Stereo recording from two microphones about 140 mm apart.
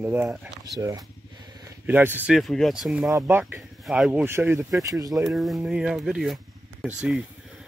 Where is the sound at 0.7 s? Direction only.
25° right (ahead or behind).